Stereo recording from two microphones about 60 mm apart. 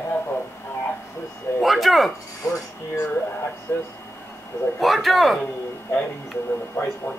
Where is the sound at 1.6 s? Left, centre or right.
Centre.